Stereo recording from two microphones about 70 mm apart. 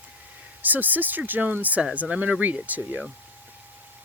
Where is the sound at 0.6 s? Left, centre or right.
Right.